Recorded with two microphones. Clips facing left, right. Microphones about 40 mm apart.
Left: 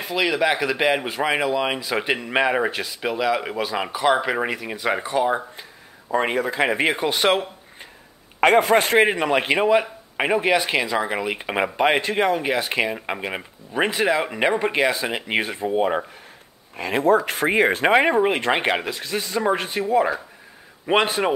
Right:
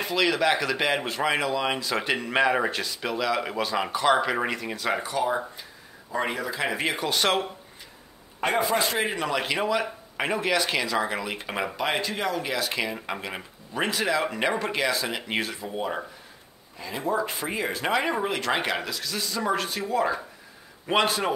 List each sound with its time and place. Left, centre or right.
0.0 s speech: centre
6.1 s speech: left; by 7.4 s centre
8.4 s a man's voice: left
9.2 s speech: left
16.7 s speech: left